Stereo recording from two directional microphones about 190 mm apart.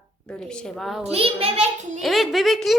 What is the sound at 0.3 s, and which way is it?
Speech, 5° left (ahead or behind).